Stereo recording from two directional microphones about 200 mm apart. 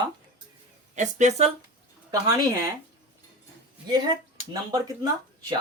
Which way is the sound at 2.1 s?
20° right (ahead or behind).